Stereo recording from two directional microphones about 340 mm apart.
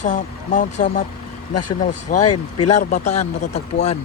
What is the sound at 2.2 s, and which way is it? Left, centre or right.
Speech, left.